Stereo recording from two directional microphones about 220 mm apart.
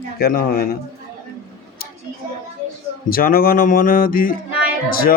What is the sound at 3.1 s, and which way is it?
Speech, 40° left (ahead or behind).